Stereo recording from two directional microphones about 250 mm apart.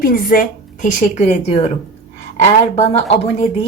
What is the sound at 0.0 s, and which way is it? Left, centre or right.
A woman's voice, left.